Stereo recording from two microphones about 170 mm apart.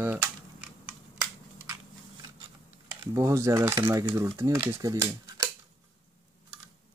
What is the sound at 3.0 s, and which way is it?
Speech, 20° right (ahead or behind).